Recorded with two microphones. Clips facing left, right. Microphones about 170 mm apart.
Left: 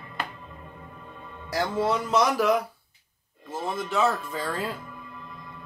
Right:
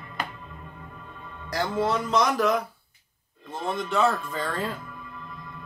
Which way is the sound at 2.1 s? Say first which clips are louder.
Even; 5° left (ahead or behind).